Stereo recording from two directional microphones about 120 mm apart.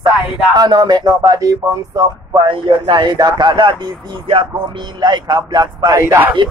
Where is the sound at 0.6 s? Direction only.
35° right (ahead or behind).